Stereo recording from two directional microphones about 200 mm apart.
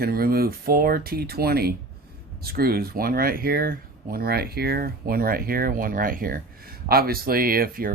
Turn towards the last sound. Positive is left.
turn(degrees=-45)  # may be behind; listen again after turning